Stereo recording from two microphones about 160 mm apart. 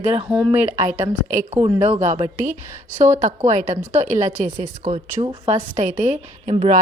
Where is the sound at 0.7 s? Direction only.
50° right (ahead or behind).